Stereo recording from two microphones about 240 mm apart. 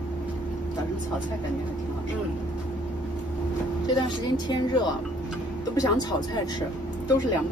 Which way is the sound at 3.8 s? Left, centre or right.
Centre.